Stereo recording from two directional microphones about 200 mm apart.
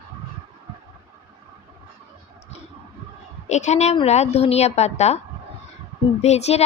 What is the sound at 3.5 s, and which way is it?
Speech, 35° left (ahead or behind).